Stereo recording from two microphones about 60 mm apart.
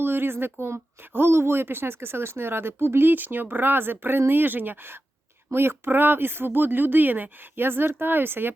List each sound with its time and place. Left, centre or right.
0.0 s speech: right